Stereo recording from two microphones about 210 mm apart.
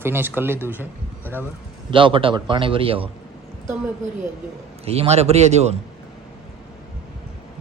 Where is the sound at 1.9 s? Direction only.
25° right (ahead or behind).